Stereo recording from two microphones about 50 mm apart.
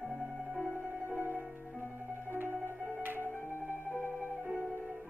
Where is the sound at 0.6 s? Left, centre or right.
Right.